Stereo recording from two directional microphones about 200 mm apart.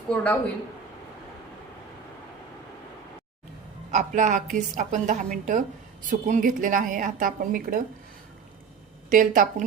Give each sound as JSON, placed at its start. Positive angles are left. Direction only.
{"t": 0.1, "sound": "speech", "side_deg": 5}
{"t": 3.9, "sound": "a woman's voice", "side_deg": -40}
{"t": 9.0, "sound": "a woman's voice", "side_deg": -40}